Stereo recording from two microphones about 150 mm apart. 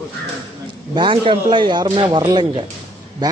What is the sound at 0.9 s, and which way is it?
A man's voice, 35° right (ahead or behind).